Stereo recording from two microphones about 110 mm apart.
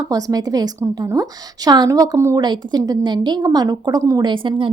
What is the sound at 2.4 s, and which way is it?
A woman's voice, 40° right (ahead or behind).